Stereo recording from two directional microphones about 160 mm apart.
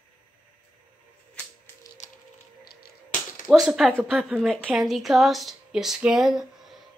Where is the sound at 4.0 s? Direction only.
5° right (ahead or behind).